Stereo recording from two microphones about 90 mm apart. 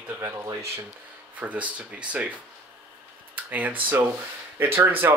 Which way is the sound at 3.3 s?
20° right (ahead or behind).